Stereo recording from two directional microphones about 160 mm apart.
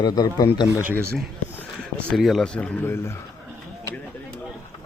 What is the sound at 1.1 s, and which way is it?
Speech, 10° left (ahead or behind).